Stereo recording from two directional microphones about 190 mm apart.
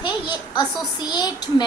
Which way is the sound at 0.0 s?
20° left (ahead or behind).